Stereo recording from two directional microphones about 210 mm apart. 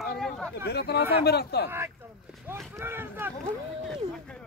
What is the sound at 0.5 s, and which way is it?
Speech, 50° left (ahead or behind).